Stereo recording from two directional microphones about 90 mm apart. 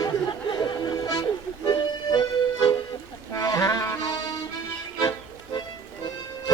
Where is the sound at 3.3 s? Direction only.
40° left (ahead or behind).